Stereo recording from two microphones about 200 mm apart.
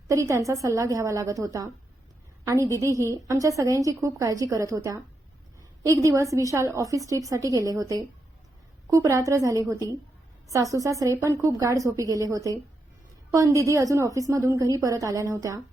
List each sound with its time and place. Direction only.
0.1 s a woman's voice: 15° right (ahead or behind)